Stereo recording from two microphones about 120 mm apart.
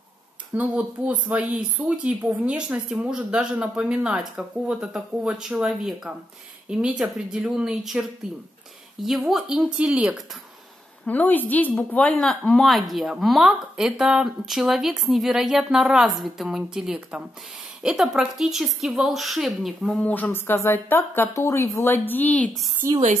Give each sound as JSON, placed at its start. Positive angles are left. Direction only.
{"t": 0.6, "sound": "a woman's voice", "side_deg": -10}
{"t": 9.0, "sound": "a woman's voice", "side_deg": 0}
{"t": 11.1, "sound": "a woman's voice", "side_deg": 15}
{"t": 19.9, "sound": "a woman's voice", "side_deg": 10}
{"t": 22.8, "sound": "speech", "side_deg": -25}